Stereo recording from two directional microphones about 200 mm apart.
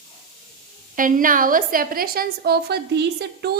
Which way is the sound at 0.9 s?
40° right (ahead or behind).